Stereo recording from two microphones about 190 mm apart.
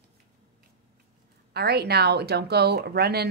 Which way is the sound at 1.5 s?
55° right (ahead or behind).